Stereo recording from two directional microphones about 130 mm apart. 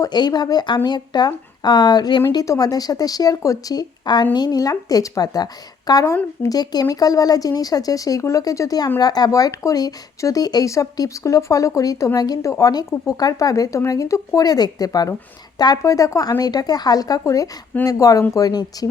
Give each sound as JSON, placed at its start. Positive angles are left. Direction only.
{"t": 0.0, "sound": "speech", "side_deg": 30}
{"t": 6.1, "sound": "speech", "side_deg": 20}